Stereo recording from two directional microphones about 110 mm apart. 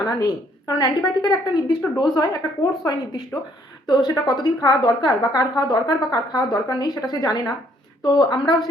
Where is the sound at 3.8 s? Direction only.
40° left (ahead or behind).